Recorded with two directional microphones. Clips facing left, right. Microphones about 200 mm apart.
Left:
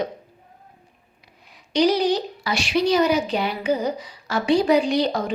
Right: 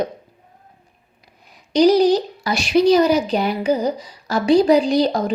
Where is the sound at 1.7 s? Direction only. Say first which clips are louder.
Right 6 dB; 40° right (ahead or behind).